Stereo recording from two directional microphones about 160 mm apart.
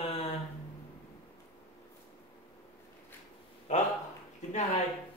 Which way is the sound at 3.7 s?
45° left (ahead or behind).